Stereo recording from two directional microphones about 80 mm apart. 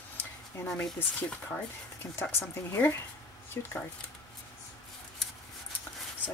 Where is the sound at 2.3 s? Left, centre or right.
Left.